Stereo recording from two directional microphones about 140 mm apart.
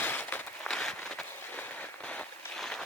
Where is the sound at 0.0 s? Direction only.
15° left (ahead or behind).